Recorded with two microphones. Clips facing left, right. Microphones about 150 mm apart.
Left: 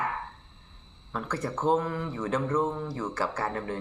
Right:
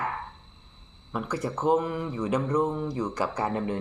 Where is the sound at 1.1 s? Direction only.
10° right (ahead or behind).